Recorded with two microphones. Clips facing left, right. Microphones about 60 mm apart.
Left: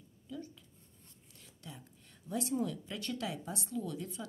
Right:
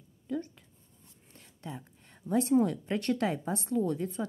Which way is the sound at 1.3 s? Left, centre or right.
Right.